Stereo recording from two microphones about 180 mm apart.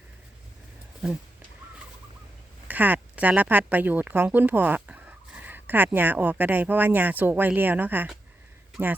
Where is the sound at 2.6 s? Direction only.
10° right (ahead or behind).